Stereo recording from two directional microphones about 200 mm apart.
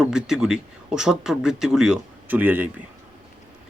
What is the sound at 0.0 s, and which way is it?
Speech, 5° right (ahead or behind).